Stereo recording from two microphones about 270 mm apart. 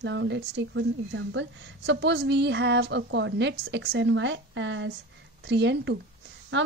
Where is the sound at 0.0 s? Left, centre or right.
Right.